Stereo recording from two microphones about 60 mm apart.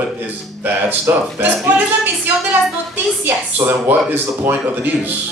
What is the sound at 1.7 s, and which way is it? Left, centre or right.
Music, right.